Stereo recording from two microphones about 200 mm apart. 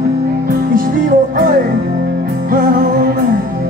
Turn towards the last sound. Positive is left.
turn(degrees=-45)  # may be behind; listen again after turning